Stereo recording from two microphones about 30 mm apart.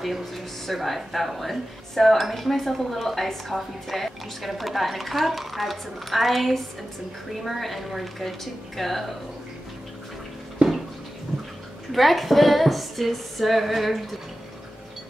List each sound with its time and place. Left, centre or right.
0.0 s a woman's voice: centre
10.6 s a sound: right
11.9 s a woman's voice: centre